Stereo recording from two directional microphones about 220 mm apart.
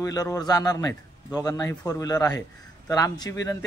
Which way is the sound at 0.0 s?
15° left (ahead or behind).